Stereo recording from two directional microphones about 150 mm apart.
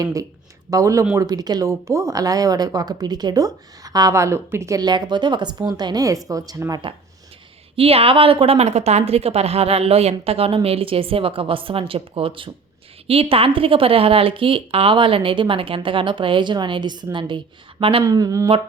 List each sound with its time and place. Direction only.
0.0 s speech: 20° right (ahead or behind)
7.8 s speech: 40° right (ahead or behind)
18.0 s speech: 25° right (ahead or behind)